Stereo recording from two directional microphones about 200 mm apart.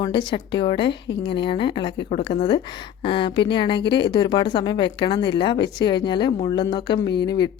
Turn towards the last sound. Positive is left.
turn(degrees=20)  # may be behind; listen again after turning